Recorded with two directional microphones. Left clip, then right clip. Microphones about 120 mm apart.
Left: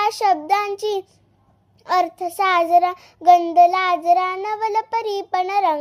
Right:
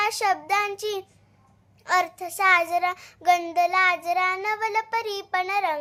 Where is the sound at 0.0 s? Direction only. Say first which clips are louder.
Left 5 dB; 35° left (ahead or behind).